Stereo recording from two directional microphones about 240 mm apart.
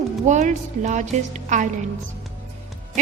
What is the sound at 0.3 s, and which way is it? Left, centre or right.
A woman's voice, right.